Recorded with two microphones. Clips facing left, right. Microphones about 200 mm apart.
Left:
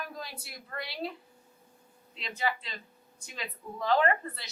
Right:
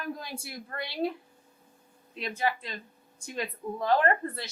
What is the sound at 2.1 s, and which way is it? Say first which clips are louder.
A woman's voice: right 3 dB; 55° right (ahead or behind).